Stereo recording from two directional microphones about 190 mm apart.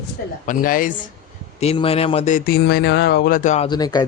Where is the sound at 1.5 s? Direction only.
30° left (ahead or behind).